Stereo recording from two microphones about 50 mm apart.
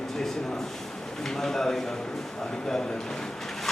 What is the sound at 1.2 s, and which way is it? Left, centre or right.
Speech, centre.